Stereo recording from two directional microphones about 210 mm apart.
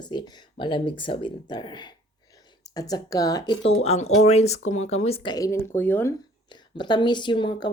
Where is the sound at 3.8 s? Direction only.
30° left (ahead or behind); by 6.1 s 10° left (ahead or behind).